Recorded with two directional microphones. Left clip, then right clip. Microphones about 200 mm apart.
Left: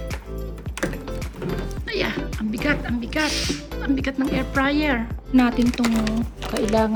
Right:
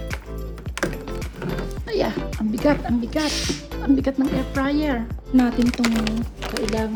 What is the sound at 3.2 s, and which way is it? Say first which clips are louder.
Speech: even; centre (ahead or behind).